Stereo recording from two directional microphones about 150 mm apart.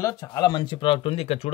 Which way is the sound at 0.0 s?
25° left (ahead or behind).